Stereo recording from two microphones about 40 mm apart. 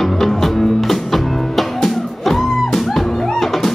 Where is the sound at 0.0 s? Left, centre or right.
Centre.